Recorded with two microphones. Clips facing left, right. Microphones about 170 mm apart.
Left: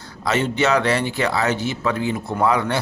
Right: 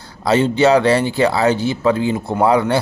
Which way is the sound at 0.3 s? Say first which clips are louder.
Right 6 dB; 30° right (ahead or behind).